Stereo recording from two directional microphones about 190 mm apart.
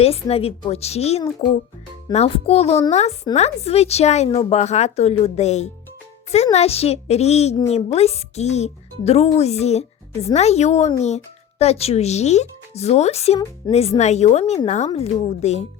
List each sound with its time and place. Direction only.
0.0 s speech: 30° left (ahead or behind)